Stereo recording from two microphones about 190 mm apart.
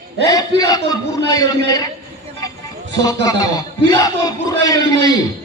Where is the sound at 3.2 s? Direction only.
20° left (ahead or behind).